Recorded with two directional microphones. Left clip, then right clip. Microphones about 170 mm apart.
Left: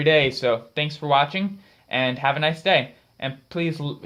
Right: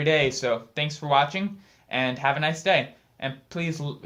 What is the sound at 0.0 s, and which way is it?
Speech, 50° left (ahead or behind).